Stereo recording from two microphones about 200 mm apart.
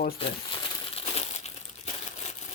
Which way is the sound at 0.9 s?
30° left (ahead or behind).